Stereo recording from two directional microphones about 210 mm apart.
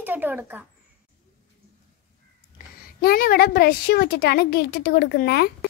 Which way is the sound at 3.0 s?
45° left (ahead or behind).